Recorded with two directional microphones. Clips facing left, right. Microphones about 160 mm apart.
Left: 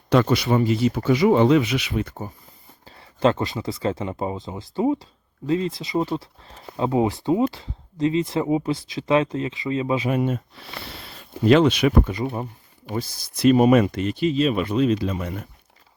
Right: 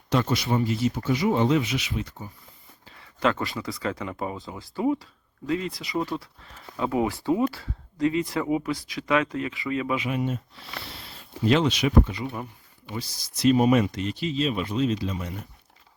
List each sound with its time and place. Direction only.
0.1 s speech: 65° left (ahead or behind)
2.8 s speech: 35° left (ahead or behind)
10.1 s speech: 55° left (ahead or behind)
12.2 s speech: 35° left (ahead or behind); by 15.4 s 60° left (ahead or behind)